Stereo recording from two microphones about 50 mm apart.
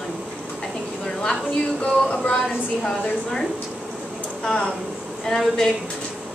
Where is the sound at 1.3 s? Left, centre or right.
Left.